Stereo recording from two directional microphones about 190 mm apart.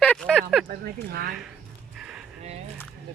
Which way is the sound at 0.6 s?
50° right (ahead or behind).